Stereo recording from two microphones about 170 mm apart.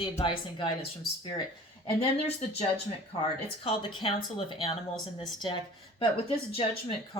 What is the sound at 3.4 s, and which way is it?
Speech, 30° left (ahead or behind).